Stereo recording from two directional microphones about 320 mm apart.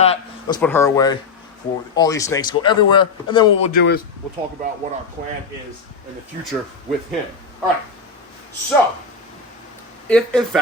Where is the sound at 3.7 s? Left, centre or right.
Left.